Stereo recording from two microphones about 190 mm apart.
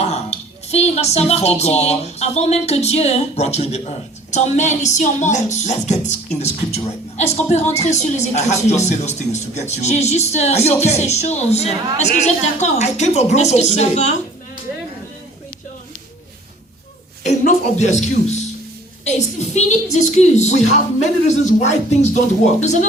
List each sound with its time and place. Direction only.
0.0 s speech: 35° left (ahead or behind)
17.2 s a woman's voice: 40° left (ahead or behind)